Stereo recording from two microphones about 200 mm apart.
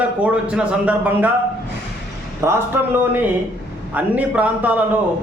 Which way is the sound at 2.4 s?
15° right (ahead or behind).